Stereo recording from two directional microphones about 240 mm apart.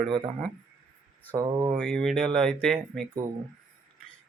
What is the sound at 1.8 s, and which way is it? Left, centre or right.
Speech, centre.